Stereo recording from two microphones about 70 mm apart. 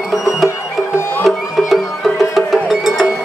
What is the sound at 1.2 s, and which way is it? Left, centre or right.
Music, centre.